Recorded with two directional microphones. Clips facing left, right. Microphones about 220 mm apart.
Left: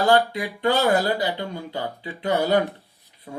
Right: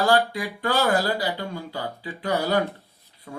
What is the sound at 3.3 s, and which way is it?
Rub, 20° left (ahead or behind).